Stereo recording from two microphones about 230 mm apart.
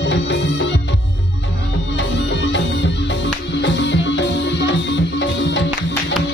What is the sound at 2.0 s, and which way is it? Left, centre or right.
Music, left.